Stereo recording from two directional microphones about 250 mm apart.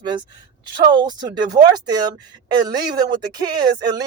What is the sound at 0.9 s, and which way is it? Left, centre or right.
Speech, centre.